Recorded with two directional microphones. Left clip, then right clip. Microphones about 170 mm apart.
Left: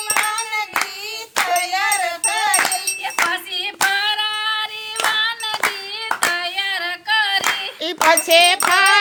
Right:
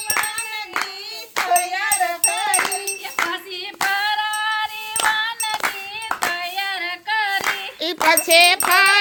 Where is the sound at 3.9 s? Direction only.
25° left (ahead or behind).